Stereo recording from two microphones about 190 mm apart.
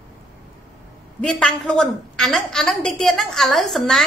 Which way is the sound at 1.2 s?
5° left (ahead or behind).